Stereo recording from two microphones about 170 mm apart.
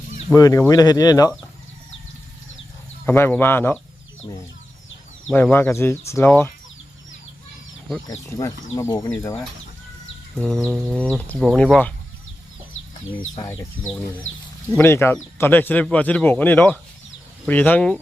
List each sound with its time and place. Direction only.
0.3 s speech: 20° left (ahead or behind)
3.1 s speech: 10° left (ahead or behind)
5.3 s speech: 10° left (ahead or behind)
8.3 s speech: 20° left (ahead or behind)
10.3 s speech: 5° left (ahead or behind)
10.7 s bird: 10° right (ahead or behind)
10.9 s speech: 5° left (ahead or behind)
13.4 s speech: 20° left (ahead or behind)
14.8 s speech: 15° left (ahead or behind)